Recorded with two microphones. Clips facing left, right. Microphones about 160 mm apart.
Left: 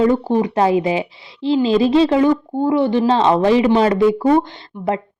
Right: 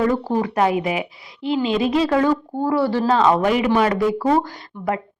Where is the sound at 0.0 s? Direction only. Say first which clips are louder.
Left 4 dB; 25° left (ahead or behind).